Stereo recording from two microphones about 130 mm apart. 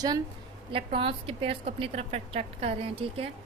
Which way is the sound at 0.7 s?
45° right (ahead or behind).